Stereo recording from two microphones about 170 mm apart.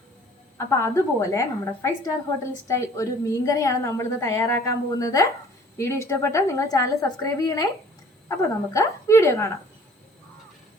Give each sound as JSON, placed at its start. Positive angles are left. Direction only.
{"t": 0.5, "sound": "a woman's voice", "side_deg": 15}